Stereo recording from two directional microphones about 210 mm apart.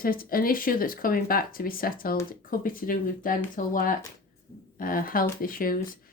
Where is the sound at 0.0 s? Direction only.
45° left (ahead or behind).